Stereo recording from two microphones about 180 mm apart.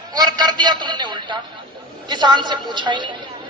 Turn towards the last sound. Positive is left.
turn(degrees=-25)  # may be behind; listen again after turning